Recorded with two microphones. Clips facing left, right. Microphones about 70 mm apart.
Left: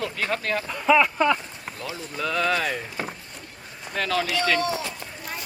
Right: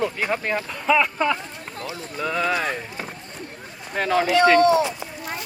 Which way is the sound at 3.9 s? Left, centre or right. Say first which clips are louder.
Right 6 dB; right.